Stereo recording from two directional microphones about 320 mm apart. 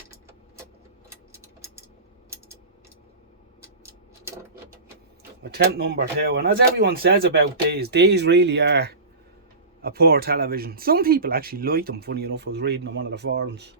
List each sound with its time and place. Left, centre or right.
1.3 s tick-tock: centre
5.4 s speech: right